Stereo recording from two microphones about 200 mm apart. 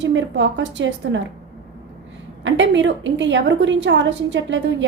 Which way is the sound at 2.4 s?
65° right (ahead or behind).